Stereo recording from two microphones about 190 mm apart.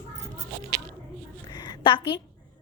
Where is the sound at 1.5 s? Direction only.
20° left (ahead or behind).